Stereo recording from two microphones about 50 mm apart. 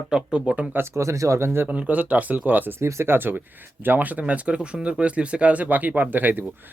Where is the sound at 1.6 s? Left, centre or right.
Right.